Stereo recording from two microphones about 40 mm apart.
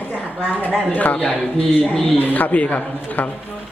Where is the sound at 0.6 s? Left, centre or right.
Left.